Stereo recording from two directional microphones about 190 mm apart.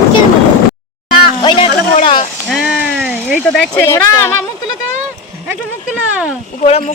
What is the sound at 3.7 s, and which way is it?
Speech, 15° left (ahead or behind).